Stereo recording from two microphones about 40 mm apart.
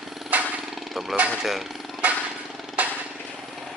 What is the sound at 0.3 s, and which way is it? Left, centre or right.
Vehicle, right.